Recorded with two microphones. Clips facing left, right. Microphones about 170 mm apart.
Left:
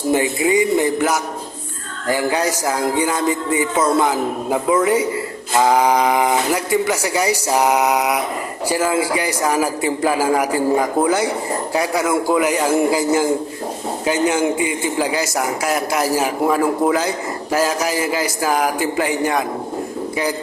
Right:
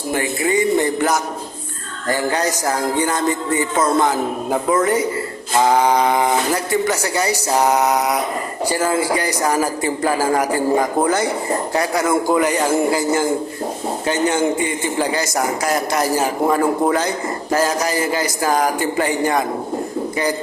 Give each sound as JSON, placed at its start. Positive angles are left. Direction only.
{"t": 0.1, "sound": "a man's voice", "side_deg": 15}